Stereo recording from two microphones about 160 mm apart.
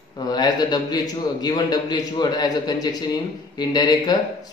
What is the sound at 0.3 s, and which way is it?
A man's voice, 25° left (ahead or behind).